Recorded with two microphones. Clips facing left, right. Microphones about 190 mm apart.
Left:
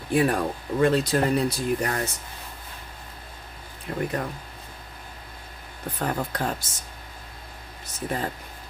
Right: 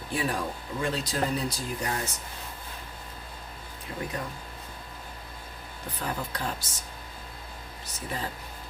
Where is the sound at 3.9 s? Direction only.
60° left (ahead or behind).